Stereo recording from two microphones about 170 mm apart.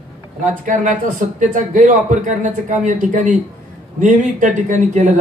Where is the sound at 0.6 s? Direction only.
45° right (ahead or behind).